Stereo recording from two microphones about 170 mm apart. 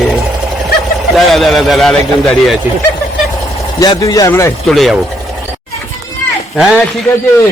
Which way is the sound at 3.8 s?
20° left (ahead or behind).